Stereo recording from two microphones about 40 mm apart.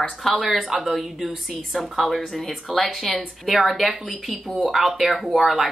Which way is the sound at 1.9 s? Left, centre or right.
Centre.